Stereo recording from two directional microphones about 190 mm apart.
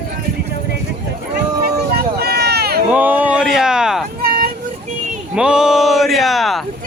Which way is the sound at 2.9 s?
10° right (ahead or behind).